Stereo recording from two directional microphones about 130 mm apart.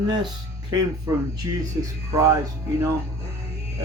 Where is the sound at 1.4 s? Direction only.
30° right (ahead or behind).